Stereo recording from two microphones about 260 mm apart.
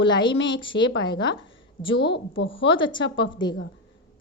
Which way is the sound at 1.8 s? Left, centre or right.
Left.